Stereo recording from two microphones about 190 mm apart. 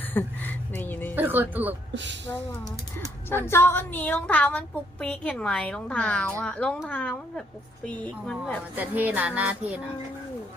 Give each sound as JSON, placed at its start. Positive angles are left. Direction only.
{"t": 0.1, "sound": "a sound", "side_deg": 10}
{"t": 1.1, "sound": "speech", "side_deg": -10}
{"t": 1.9, "sound": "speech", "side_deg": -70}
{"t": 3.2, "sound": "a woman's voice", "side_deg": 10}
{"t": 8.7, "sound": "speech", "side_deg": -10}